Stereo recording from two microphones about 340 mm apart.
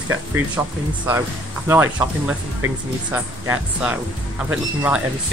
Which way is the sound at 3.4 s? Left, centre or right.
Centre.